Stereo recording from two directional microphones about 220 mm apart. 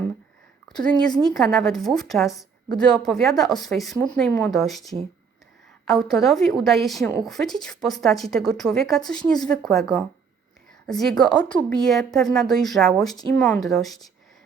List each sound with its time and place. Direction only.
1.1 s a woman's voice: centre (ahead or behind)